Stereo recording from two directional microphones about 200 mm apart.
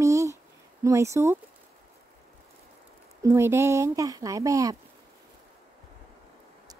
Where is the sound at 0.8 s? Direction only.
15° right (ahead or behind).